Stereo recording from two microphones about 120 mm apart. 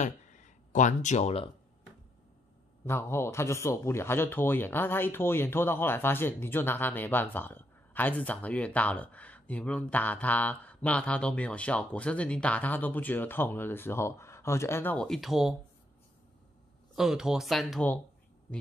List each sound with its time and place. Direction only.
0.0 s a sound: 90° left
2.9 s a man's voice: 20° left (ahead or behind)
15.0 s speech: centre (ahead or behind)
16.9 s speech: 5° right (ahead or behind)